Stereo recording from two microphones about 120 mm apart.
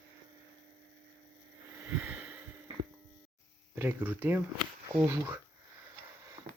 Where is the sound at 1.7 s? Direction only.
20° right (ahead or behind).